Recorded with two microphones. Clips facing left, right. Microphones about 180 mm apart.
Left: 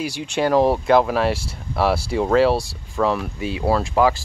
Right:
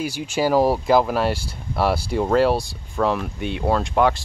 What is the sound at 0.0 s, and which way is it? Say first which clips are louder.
Speech: even; centre (ahead or behind).